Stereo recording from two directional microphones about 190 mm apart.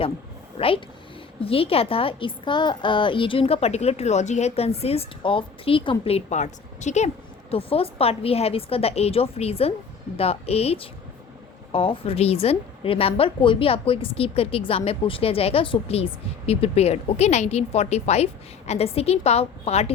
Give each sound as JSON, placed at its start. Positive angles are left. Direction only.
{"t": 1.4, "sound": "a woman's voice", "side_deg": 30}